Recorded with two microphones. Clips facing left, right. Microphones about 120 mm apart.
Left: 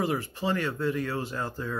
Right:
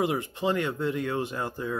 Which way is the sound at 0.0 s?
20° right (ahead or behind).